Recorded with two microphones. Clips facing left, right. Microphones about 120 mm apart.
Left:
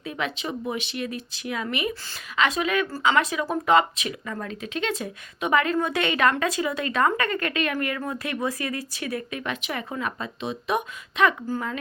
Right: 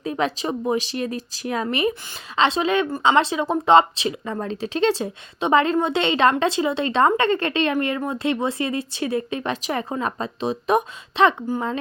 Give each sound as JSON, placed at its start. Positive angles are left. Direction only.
{"t": 0.0, "sound": "speech", "side_deg": -35}